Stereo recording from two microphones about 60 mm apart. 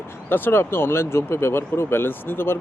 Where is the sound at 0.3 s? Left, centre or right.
Left.